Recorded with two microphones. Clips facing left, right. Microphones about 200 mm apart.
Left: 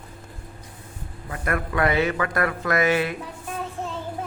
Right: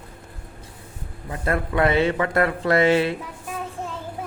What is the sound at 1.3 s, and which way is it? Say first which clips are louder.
A man's voice: right 2 dB; 25° right (ahead or behind).